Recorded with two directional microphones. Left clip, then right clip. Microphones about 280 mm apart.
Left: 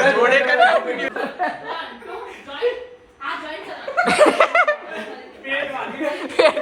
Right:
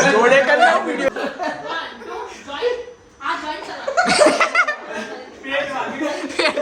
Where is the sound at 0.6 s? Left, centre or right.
Centre.